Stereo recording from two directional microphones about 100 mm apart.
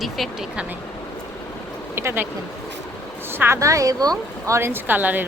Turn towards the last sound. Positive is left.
turn(degrees=-20)  # may be behind; listen again after turning